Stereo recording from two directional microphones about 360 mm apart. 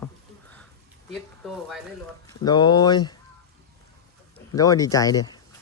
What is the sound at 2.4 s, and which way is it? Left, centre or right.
Speech, centre.